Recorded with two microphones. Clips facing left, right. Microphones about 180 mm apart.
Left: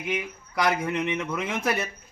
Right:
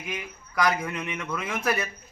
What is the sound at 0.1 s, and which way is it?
A man's voice, 25° left (ahead or behind).